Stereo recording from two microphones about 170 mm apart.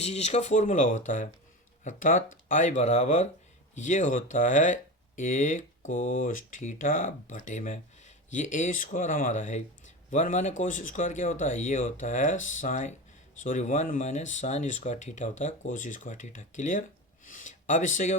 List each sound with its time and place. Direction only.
0.0 s speech: 40° left (ahead or behind)